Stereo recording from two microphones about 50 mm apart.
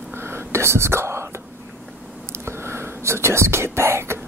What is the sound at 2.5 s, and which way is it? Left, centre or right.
Whispering, right.